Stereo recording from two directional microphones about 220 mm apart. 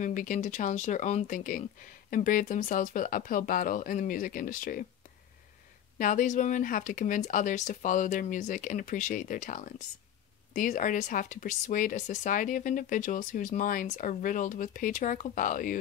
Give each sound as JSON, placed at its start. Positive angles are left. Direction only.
{"t": 0.0, "sound": "speech", "side_deg": 35}
{"t": 5.9, "sound": "speech", "side_deg": 35}